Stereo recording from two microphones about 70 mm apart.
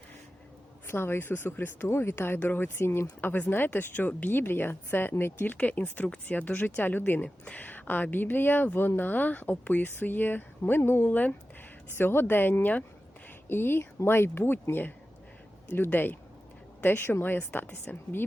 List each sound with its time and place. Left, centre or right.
0.9 s speech: left